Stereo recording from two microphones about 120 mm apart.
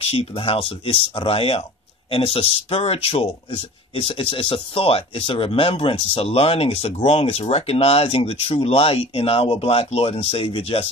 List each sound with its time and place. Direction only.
0.0 s speech: 55° left (ahead or behind)